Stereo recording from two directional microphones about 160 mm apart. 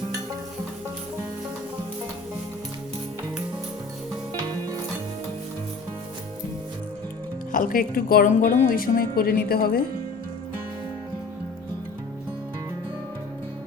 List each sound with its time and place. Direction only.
7.5 s speech: 60° left (ahead or behind)